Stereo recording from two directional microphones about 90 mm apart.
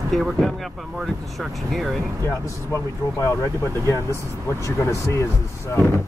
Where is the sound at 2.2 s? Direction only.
30° left (ahead or behind).